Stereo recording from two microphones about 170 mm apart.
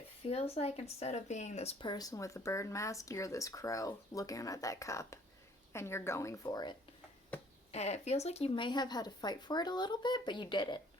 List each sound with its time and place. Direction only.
0.3 s speech: 35° left (ahead or behind)
1.8 s a woman's voice: 25° left (ahead or behind)
7.7 s speech: 40° left (ahead or behind)